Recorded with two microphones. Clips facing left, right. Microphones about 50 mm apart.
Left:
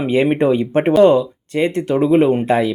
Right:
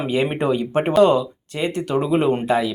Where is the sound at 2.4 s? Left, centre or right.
Left.